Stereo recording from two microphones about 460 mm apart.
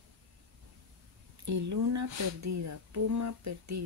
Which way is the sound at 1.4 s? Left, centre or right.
Right.